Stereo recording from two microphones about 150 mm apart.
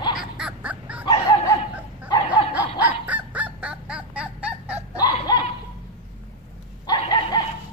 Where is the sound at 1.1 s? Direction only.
30° left (ahead or behind).